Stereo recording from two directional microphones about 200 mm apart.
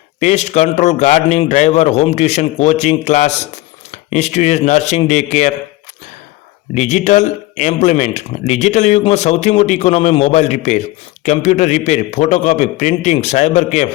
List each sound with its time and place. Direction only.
0.2 s speech: 35° left (ahead or behind)
6.7 s speech: 35° left (ahead or behind)